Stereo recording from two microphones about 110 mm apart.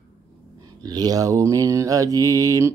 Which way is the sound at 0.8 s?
35° right (ahead or behind).